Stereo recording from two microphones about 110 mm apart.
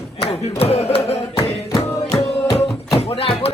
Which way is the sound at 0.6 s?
65° left (ahead or behind).